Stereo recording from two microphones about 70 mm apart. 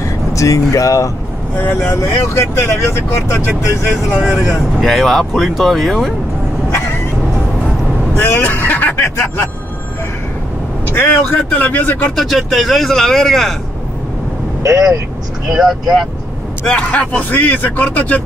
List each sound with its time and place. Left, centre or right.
0.0 s speech: left
4.2 s speech: centre
4.8 s speech: centre
8.2 s vehicle: left
8.5 s music: left
10.9 s speech: left
12.2 s speech: centre
14.6 s speech: right
15.5 s speech: centre
16.8 s speech: left